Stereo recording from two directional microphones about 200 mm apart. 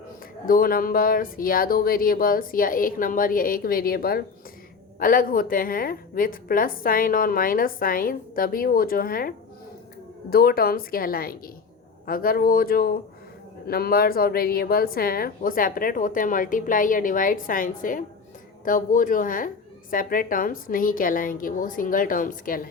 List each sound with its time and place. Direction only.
0.4 s a woman's voice: 45° left (ahead or behind)